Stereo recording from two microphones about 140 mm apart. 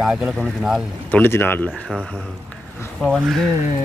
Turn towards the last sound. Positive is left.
turn(degrees=0)  # may be behind; listen again after turning